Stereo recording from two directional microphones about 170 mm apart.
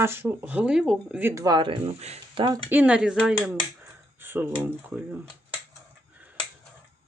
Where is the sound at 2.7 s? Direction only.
10° right (ahead or behind).